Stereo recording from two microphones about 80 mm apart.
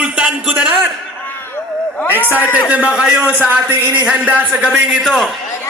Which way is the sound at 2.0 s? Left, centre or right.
Left.